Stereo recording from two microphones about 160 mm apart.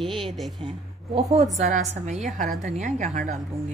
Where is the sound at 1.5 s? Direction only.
45° right (ahead or behind).